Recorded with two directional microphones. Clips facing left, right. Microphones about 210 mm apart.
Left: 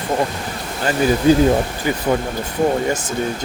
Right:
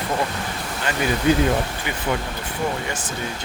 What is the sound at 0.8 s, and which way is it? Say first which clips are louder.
Speech: left 6 dB; 35° left (ahead or behind).